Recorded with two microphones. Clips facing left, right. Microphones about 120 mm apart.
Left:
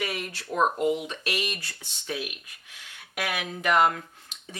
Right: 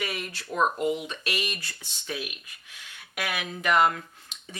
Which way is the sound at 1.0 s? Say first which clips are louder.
Left 1 dB; 55° left (ahead or behind).